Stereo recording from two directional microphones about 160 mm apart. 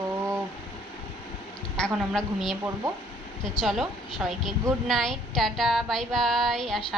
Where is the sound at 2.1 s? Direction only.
Centre (ahead or behind).